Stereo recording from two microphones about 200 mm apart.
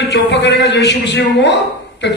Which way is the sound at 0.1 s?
60° left (ahead or behind).